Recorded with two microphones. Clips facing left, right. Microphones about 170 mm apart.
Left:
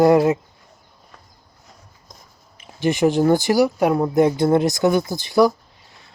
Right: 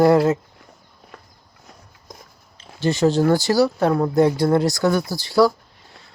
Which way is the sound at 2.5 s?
15° left (ahead or behind).